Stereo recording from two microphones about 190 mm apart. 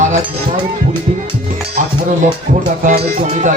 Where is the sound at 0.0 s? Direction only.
40° right (ahead or behind).